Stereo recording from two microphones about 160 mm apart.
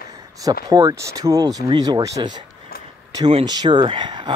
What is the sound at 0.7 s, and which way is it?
Speech, 20° right (ahead or behind).